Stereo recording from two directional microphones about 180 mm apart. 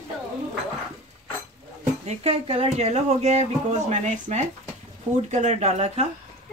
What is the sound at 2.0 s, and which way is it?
Speech, 35° right (ahead or behind).